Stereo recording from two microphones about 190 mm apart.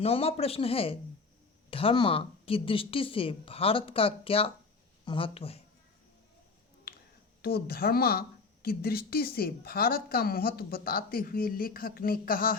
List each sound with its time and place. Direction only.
0.0 s a woman's voice: 30° left (ahead or behind)
6.9 s a sound: 55° left (ahead or behind)
7.4 s a woman's voice: 55° left (ahead or behind)